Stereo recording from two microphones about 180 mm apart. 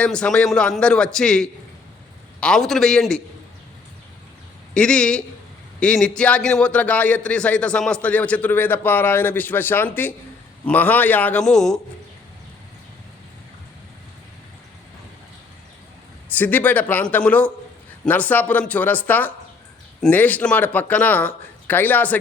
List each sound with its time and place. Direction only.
0.0 s a man's voice: 5° left (ahead or behind)
4.7 s a man's voice: 5° left (ahead or behind)
16.3 s a man's voice: 10° left (ahead or behind)